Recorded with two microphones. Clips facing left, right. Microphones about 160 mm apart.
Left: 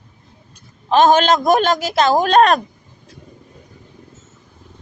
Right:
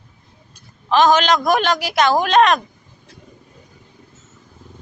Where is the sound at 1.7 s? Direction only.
25° left (ahead or behind).